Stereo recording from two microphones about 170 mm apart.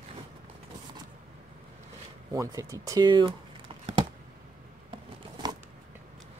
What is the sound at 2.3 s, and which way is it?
Speech, 20° right (ahead or behind).